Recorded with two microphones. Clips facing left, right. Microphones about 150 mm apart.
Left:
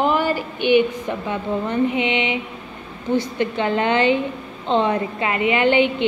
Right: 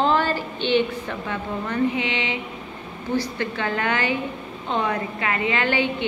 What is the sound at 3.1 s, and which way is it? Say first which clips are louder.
A woman's voice: left 4 dB; 20° left (ahead or behind).